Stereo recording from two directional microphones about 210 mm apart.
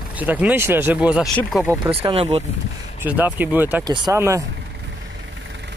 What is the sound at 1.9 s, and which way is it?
Speech, 25° right (ahead or behind).